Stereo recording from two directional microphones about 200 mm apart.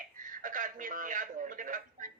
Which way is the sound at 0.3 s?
40° right (ahead or behind).